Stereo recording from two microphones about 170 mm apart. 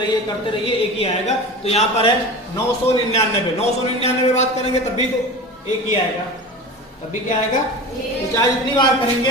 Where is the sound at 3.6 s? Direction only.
40° left (ahead or behind).